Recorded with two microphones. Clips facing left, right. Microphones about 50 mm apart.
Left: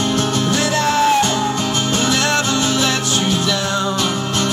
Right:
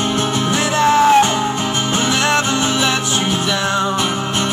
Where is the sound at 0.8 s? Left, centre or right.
Right.